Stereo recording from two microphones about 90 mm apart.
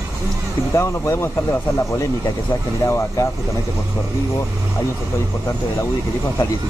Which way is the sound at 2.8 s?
35° left (ahead or behind).